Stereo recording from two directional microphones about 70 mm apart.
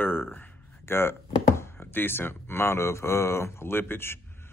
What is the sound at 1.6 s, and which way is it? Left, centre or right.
Speech, left.